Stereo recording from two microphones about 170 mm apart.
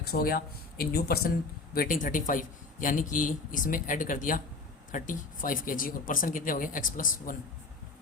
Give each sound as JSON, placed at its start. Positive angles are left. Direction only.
{"t": 0.1, "sound": "speech", "side_deg": 60}